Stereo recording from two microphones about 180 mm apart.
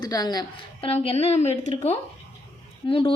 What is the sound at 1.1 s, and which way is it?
Speech, 35° left (ahead or behind).